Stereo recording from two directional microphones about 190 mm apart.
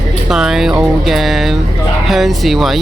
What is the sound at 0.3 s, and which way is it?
Speech, 5° right (ahead or behind).